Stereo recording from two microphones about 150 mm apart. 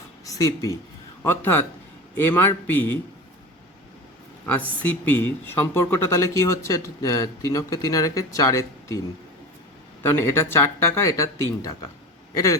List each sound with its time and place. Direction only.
0.3 s a man's voice: 20° left (ahead or behind)
4.4 s speech: 10° left (ahead or behind)
10.0 s speech: 15° left (ahead or behind)